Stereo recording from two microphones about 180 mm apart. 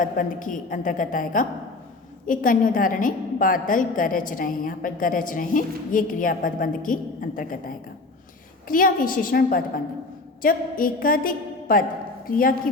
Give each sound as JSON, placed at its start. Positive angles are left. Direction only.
{"t": 0.0, "sound": "a woman's voice", "side_deg": 45}
{"t": 8.6, "sound": "a woman's voice", "side_deg": 50}